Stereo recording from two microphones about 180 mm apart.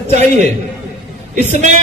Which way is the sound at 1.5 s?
40° right (ahead or behind).